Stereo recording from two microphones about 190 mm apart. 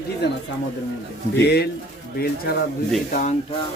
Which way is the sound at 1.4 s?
60° left (ahead or behind).